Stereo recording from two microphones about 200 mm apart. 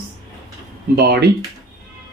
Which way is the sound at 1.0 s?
55° right (ahead or behind).